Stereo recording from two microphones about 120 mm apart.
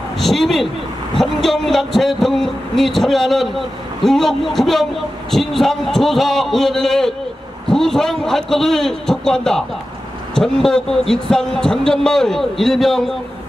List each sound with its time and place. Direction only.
0.2 s a man's voice: centre (ahead or behind)